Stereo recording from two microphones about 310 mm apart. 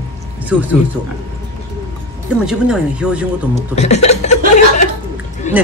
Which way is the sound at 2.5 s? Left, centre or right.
Centre.